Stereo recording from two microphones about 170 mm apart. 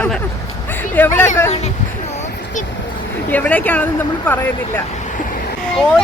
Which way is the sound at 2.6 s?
45° left (ahead or behind).